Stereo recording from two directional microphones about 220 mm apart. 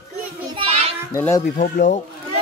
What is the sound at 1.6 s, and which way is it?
Speech, 35° left (ahead or behind).